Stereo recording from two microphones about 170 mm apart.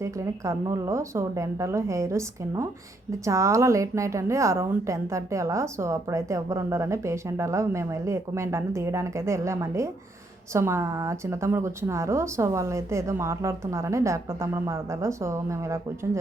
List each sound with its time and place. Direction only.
0.0 s a woman's voice: 20° right (ahead or behind)